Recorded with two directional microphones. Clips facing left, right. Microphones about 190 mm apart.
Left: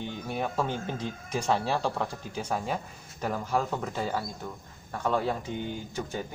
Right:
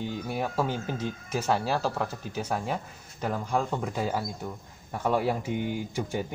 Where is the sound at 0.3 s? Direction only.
5° right (ahead or behind).